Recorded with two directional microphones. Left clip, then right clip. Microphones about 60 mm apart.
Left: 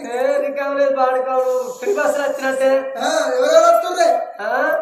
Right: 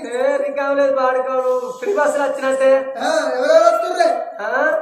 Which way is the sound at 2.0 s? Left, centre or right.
Right.